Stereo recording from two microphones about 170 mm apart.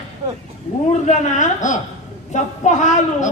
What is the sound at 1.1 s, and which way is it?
A woman's voice, 45° left (ahead or behind).